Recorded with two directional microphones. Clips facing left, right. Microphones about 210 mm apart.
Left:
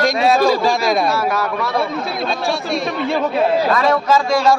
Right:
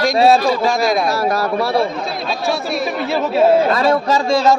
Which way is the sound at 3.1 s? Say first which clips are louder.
Right 1 dB; 5° right (ahead or behind).